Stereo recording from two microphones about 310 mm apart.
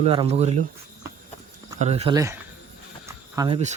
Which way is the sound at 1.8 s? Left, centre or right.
Centre.